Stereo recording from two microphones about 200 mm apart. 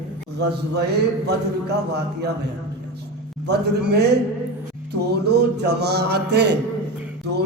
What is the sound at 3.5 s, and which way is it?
Mantra, 55° right (ahead or behind).